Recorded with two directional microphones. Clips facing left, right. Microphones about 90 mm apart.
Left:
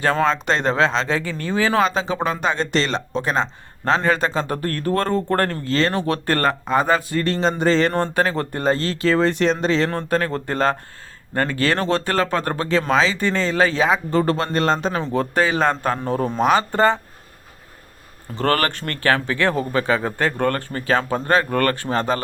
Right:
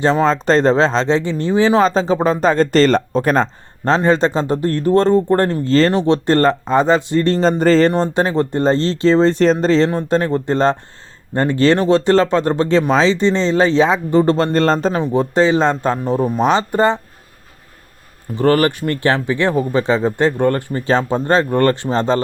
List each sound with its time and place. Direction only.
0.0 s speech: 20° right (ahead or behind)
0.3 s speech: 35° right (ahead or behind)
3.8 s speech: 30° right (ahead or behind)
7.9 s speech: 20° right (ahead or behind)
9.9 s speech: 25° right (ahead or behind)
11.8 s speech: 20° right (ahead or behind)
14.3 s speech: 35° right (ahead or behind)
14.9 s speech: 20° right (ahead or behind)
16.4 s speech: 25° right (ahead or behind)
18.3 s speech: 15° right (ahead or behind)
20.8 s speech: 30° right (ahead or behind)